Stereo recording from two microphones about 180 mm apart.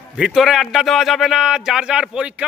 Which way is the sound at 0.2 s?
Centre (ahead or behind).